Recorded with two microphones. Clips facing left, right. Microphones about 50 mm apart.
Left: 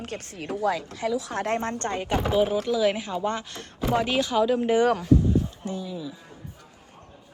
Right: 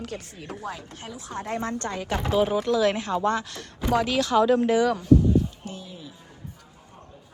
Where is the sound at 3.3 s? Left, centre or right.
Left.